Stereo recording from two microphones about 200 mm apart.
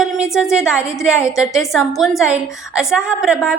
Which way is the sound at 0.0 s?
5° right (ahead or behind).